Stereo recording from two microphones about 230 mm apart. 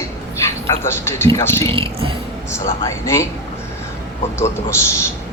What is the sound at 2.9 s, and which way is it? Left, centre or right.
Speech, centre.